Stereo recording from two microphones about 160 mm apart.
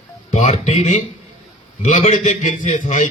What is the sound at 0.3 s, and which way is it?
A man's voice, 50° left (ahead or behind).